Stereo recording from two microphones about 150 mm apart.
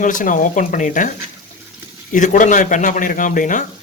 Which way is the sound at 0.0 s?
60° left (ahead or behind).